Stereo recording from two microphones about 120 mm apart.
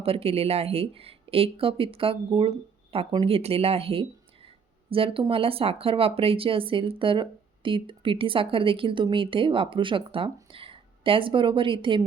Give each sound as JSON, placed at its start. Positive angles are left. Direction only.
{"t": 0.0, "sound": "speech", "side_deg": -55}
{"t": 4.4, "sound": "a sound", "side_deg": -50}
{"t": 5.3, "sound": "speech", "side_deg": -50}